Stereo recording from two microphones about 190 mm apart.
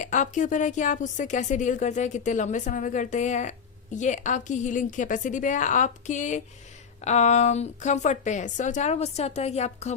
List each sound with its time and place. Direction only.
0.0 s a woman's voice: 40° left (ahead or behind)